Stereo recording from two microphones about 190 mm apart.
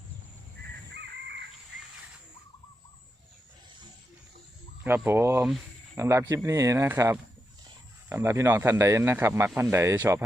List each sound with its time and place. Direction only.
0.6 s crow: 60° right (ahead or behind)
4.8 s a man's voice: 10° right (ahead or behind)